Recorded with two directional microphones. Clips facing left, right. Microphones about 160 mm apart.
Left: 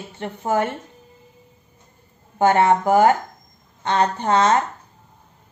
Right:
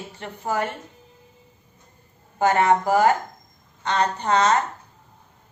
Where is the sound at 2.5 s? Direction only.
30° left (ahead or behind).